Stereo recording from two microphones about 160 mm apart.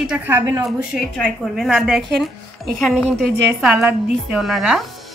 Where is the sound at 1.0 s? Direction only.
Centre (ahead or behind).